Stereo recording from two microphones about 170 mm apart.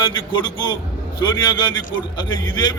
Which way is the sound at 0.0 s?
25° left (ahead or behind).